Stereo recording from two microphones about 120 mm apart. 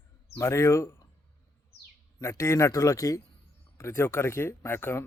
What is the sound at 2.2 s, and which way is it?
Speech, 25° left (ahead or behind).